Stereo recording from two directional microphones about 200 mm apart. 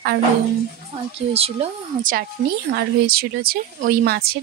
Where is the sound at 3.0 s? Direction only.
50° right (ahead or behind).